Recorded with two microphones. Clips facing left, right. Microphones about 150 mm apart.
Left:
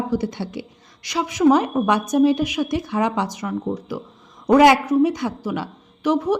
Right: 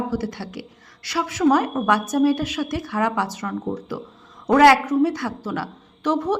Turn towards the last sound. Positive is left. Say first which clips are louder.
# left 2 dB
turn(degrees=10)  # may be behind; listen again after turning